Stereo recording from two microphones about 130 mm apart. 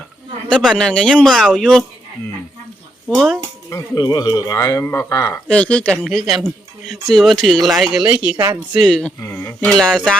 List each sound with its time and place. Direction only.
0.4 s speech: 5° left (ahead or behind)
3.1 s speech: centre (ahead or behind)
3.7 s speech: 25° left (ahead or behind)
5.5 s speech: 10° left (ahead or behind); by 8.4 s 10° right (ahead or behind)
8.9 s speech: 10° left (ahead or behind)
9.3 s a sound: 15° left (ahead or behind)
9.7 s speech: centre (ahead or behind)